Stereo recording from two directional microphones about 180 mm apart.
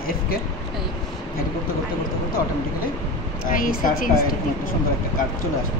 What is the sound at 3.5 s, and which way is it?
Speech, 50° left (ahead or behind).